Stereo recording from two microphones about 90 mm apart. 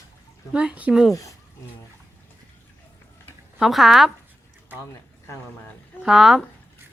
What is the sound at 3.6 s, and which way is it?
Speech, centre (ahead or behind).